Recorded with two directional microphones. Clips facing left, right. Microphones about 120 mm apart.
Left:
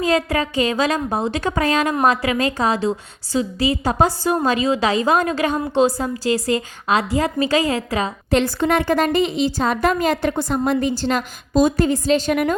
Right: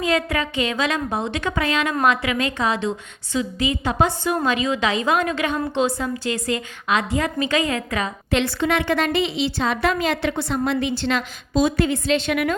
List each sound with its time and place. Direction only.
0.0 s a woman's voice: 35° left (ahead or behind)